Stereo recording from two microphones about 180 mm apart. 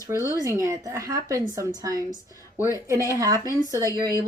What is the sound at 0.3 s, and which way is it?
A woman's voice, 20° right (ahead or behind).